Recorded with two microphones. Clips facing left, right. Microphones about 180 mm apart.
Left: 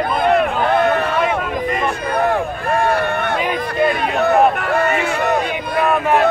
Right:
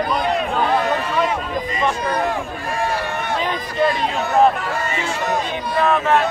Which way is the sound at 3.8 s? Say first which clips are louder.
Left 5 dB; 60° left (ahead or behind).